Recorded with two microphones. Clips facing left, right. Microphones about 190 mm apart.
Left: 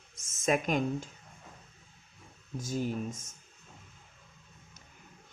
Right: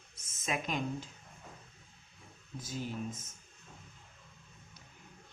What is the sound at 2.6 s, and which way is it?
Speech, 45° left (ahead or behind).